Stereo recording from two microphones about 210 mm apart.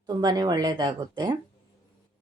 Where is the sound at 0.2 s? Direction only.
20° right (ahead or behind).